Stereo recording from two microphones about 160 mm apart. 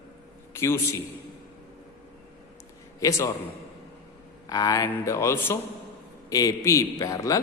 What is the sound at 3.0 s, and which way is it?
Speech, 20° left (ahead or behind).